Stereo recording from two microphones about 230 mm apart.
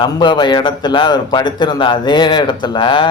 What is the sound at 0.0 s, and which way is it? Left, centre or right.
A man's voice, centre.